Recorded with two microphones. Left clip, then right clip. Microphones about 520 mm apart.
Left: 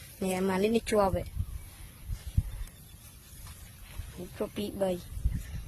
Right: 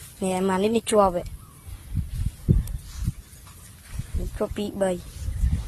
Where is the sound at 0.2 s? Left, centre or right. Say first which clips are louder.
Right 6 dB; left.